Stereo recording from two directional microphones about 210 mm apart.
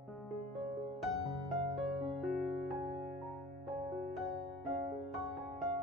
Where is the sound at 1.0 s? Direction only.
Centre (ahead or behind).